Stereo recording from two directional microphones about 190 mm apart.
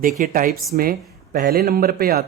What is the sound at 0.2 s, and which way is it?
Speech, 45° right (ahead or behind).